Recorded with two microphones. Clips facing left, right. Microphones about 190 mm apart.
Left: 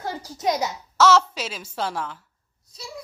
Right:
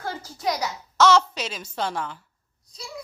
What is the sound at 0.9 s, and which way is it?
A woman's voice, 5° left (ahead or behind).